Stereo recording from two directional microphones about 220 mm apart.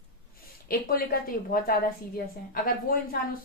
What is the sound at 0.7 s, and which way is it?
Speech, 40° left (ahead or behind).